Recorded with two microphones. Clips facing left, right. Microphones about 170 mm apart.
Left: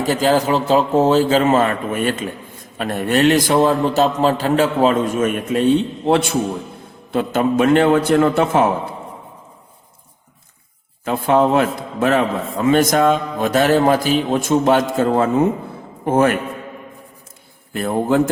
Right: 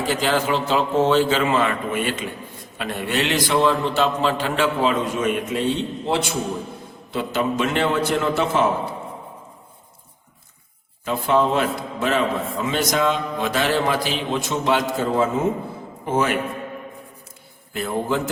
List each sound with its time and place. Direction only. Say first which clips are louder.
0.0 s a man's voice: left 5 dB; 40° left (ahead or behind)
11.0 s a man's voice: left 4 dB; 55° left (ahead or behind)
17.7 s a man's voice: left 6 dB; 50° left (ahead or behind)